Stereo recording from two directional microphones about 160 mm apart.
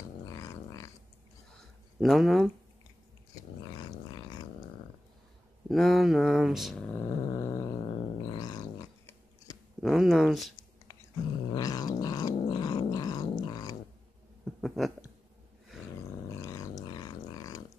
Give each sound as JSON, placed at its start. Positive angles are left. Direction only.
{"t": 0.2, "sound": "growling", "side_deg": 20}
{"t": 2.0, "sound": "speech", "side_deg": 0}
{"t": 3.6, "sound": "a sound", "side_deg": 25}
{"t": 5.7, "sound": "speech", "side_deg": 0}
{"t": 6.9, "sound": "purr", "side_deg": 20}
{"t": 7.8, "sound": "cat", "side_deg": 35}
{"t": 9.8, "sound": "speech", "side_deg": 0}
{"t": 11.5, "sound": "cat", "side_deg": 25}
{"t": 12.4, "sound": "growling", "side_deg": 25}
{"t": 14.4, "sound": "a sound", "side_deg": 0}
{"t": 16.3, "sound": "dog", "side_deg": 20}